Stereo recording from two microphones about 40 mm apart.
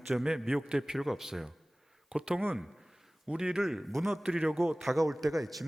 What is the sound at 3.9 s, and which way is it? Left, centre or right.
A man's voice, centre.